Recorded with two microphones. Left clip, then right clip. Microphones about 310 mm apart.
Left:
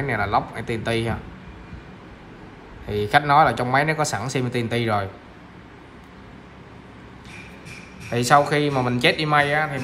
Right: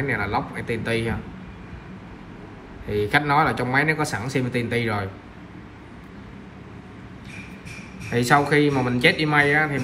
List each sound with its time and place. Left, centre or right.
0.0 s speech: centre
2.9 s speech: centre
8.1 s speech: centre